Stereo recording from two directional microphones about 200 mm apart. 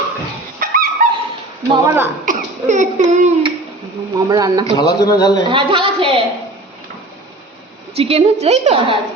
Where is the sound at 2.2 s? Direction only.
40° right (ahead or behind).